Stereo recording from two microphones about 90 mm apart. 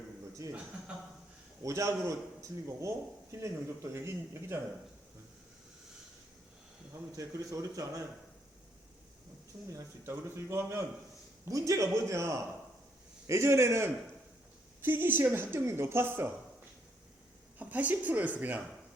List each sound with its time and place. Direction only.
0.9 s a woman's voice: 10° right (ahead or behind)
1.6 s a man's voice: 35° right (ahead or behind)
3.9 s speech: 30° right (ahead or behind)
7.2 s a man's voice: 40° right (ahead or behind)
9.6 s a man's voice: 35° right (ahead or behind)
17.6 s a woman's voice: 15° right (ahead or behind)